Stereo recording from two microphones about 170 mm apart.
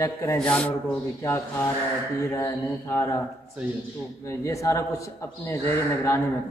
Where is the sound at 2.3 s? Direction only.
15° left (ahead or behind).